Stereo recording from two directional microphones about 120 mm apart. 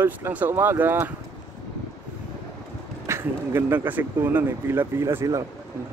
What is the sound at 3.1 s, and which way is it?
Speech, 20° right (ahead or behind).